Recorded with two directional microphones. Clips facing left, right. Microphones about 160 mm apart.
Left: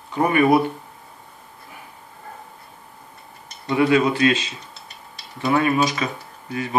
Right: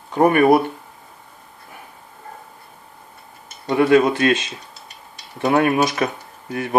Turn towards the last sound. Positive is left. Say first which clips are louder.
# right 2 dB
turn(degrees=-55)  # may be behind; listen again after turning